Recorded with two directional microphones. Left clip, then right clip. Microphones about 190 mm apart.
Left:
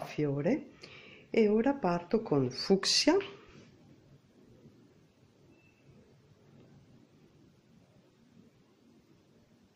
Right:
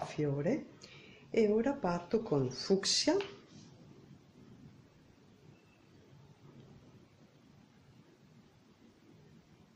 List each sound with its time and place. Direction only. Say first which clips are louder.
0.1 s speech: left 5 dB; 45° left (ahead or behind)